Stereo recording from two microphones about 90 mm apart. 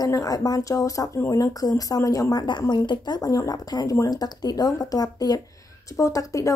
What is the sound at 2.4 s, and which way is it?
A woman's voice, 55° left (ahead or behind).